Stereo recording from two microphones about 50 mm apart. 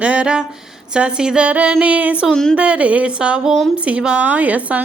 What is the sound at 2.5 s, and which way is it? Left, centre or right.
A woman's voice, right.